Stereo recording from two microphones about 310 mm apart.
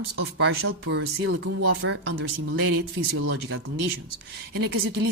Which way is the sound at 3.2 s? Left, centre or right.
Right.